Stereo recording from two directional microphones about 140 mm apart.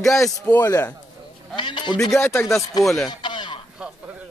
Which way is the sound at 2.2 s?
15° left (ahead or behind).